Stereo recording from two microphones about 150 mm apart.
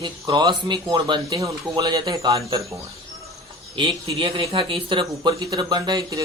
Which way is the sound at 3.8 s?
35° right (ahead or behind).